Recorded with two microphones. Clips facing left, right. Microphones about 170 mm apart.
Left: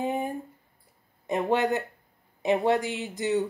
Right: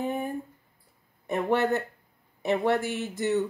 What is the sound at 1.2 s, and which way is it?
A woman's voice, 15° left (ahead or behind).